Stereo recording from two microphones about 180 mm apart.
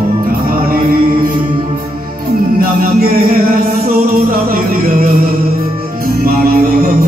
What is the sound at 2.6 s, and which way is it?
Music, 55° right (ahead or behind).